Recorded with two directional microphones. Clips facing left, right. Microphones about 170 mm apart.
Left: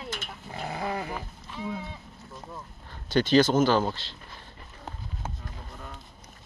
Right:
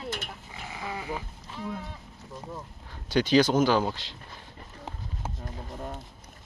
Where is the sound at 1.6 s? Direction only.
5° left (ahead or behind).